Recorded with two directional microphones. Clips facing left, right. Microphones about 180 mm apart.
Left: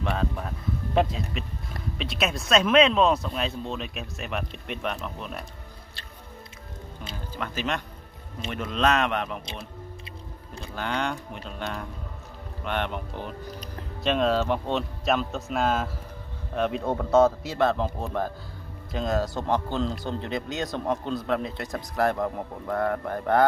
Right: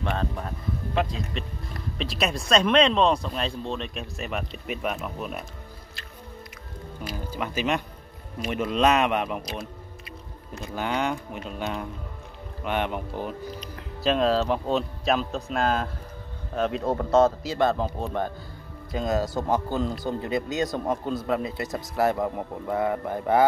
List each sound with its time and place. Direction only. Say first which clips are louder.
0.0 s speech: even; centre (ahead or behind)
7.2 s speech: right 3 dB; 10° right (ahead or behind)
10.0 s music: even; 30° left (ahead or behind)
10.7 s speech: right 2 dB; 10° right (ahead or behind)